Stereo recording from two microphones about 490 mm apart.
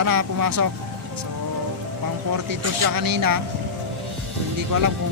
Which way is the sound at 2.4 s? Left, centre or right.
Right.